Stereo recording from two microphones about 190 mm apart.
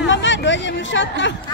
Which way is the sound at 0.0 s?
75° left (ahead or behind).